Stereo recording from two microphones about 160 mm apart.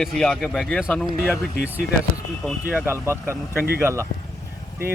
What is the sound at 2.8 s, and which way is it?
Speech, 15° right (ahead or behind).